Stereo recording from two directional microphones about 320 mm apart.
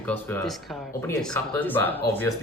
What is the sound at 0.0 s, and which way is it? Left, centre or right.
Speech, centre.